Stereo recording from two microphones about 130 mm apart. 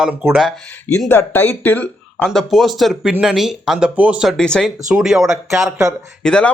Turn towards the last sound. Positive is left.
turn(degrees=0)  # may be behind; listen again after turning